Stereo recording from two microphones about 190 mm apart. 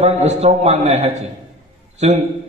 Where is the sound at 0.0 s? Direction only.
35° right (ahead or behind).